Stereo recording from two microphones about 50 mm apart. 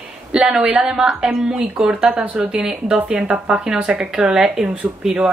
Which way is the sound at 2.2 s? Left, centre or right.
Right.